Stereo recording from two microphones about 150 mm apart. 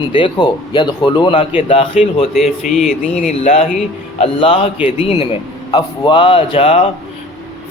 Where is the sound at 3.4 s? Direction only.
45° left (ahead or behind).